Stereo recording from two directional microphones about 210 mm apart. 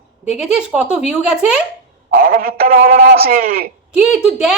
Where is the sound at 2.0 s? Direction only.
45° right (ahead or behind).